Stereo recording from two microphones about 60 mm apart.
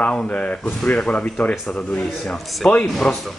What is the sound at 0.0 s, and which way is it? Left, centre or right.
Speech, left.